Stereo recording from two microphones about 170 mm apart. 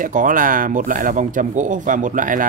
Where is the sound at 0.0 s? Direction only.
50° right (ahead or behind).